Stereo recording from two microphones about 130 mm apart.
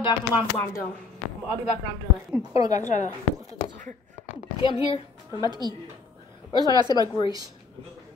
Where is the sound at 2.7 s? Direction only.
70° left (ahead or behind).